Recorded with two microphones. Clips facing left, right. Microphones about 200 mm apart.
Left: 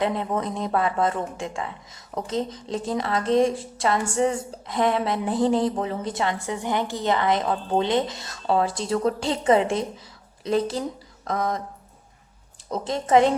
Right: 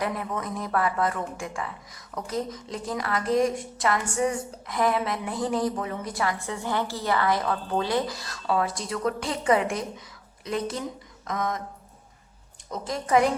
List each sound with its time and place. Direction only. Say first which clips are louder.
0.0 s a woman's voice: left 5 dB; 25° left (ahead or behind)
12.7 s a woman's voice: left 4 dB; 25° left (ahead or behind)